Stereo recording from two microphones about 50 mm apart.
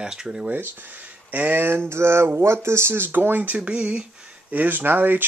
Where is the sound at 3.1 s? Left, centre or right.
Right.